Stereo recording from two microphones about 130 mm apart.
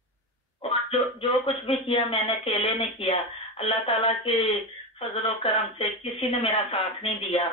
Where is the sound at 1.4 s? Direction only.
50° left (ahead or behind).